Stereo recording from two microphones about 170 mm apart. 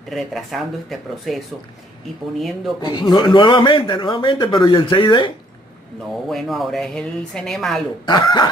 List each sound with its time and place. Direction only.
0.1 s a woman's voice: centre (ahead or behind)
2.8 s speech: 25° left (ahead or behind)
6.2 s a woman's voice: centre (ahead or behind)
8.0 s speech: 25° left (ahead or behind)